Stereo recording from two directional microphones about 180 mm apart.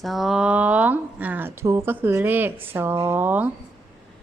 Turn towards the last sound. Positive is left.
turn(degrees=-10)  # may be behind; listen again after turning